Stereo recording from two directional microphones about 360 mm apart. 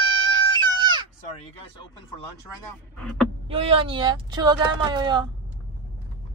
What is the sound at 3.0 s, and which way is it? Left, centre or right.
Speech, centre.